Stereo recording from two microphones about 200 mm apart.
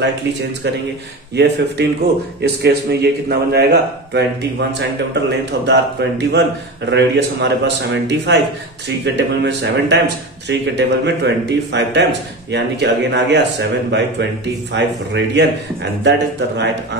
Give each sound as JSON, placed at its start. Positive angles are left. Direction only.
{"t": 1.3, "sound": "a man's voice", "side_deg": -60}